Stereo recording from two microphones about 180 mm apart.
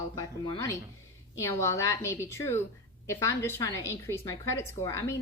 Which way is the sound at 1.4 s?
15° left (ahead or behind).